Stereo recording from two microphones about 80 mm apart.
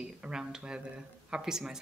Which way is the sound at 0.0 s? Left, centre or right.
Centre.